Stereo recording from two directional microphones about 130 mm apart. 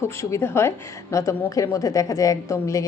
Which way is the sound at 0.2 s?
20° left (ahead or behind).